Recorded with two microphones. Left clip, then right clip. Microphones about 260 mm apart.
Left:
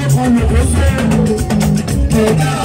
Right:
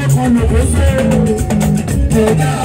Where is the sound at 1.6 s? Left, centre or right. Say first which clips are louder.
Even; left.